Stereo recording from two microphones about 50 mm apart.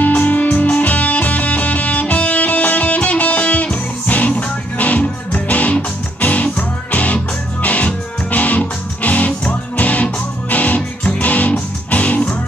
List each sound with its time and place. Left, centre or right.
0.2 s music: left